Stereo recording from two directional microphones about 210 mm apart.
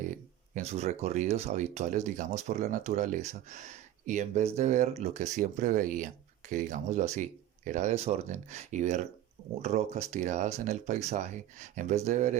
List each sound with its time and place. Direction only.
0.5 s speech: 30° right (ahead or behind)